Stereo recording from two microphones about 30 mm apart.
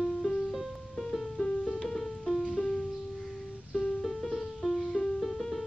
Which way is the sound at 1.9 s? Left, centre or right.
Centre.